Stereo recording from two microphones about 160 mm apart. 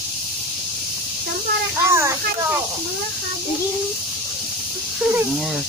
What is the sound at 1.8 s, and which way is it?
Speech, 15° right (ahead or behind).